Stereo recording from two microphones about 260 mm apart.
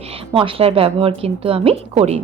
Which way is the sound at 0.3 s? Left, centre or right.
Right.